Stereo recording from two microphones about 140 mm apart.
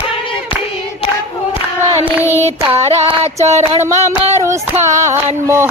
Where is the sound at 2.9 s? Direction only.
50° right (ahead or behind).